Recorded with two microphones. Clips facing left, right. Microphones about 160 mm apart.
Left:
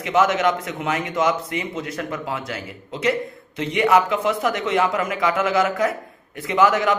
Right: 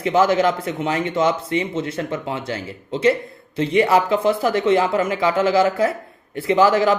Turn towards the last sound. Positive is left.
turn(degrees=-30)  # may be behind; listen again after turning